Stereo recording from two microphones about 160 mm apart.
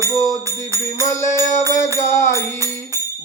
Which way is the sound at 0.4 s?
20° right (ahead or behind).